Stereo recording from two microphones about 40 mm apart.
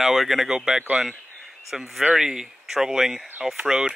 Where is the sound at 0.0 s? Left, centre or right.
Centre.